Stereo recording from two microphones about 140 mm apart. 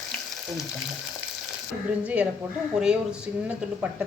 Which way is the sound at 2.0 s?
10° right (ahead or behind).